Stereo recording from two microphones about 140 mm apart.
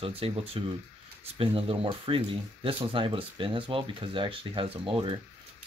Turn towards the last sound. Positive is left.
turn(degrees=-40)  # may be behind; listen again after turning